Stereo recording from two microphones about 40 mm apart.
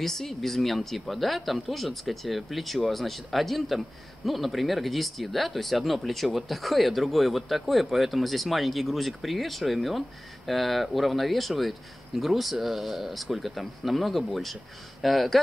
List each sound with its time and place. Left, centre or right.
0.0 s speech: centre